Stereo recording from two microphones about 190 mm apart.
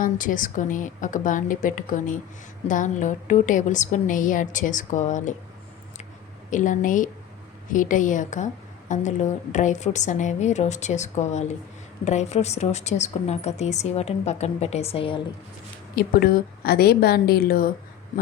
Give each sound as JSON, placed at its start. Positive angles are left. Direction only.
{"t": 0.0, "sound": "a woman's voice", "side_deg": 45}
{"t": 6.5, "sound": "a woman's voice", "side_deg": 45}
{"t": 16.0, "sound": "a woman's voice", "side_deg": 55}